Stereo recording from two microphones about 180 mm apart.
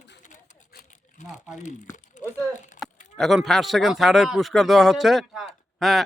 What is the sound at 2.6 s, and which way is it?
Livestock, 45° left (ahead or behind).